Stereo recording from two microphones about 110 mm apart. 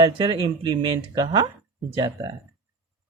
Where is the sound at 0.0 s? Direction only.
45° right (ahead or behind).